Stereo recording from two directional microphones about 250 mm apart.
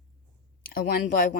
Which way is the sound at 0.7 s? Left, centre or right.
Left.